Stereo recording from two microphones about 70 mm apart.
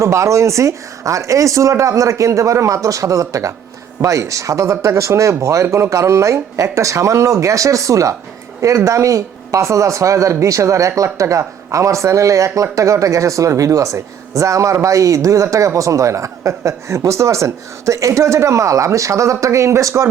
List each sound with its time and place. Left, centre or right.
0.0 s speech: right